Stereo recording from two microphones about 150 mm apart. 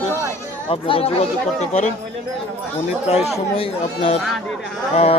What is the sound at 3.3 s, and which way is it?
Speech, 40° left (ahead or behind).